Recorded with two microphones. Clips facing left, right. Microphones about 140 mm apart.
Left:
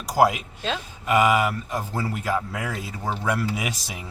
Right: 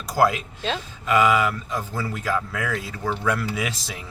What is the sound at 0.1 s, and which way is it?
Speech, 10° left (ahead or behind).